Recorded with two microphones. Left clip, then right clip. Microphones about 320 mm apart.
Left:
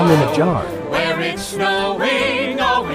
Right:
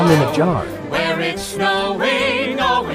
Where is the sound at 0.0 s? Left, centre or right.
Centre.